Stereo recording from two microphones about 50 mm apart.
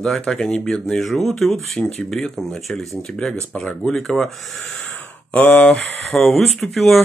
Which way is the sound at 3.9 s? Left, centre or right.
Centre.